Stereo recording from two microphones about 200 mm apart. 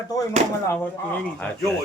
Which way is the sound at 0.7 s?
10° left (ahead or behind).